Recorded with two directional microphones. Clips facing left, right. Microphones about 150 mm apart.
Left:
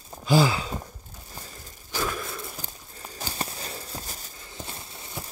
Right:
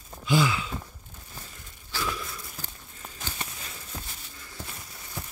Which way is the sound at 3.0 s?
35° left (ahead or behind).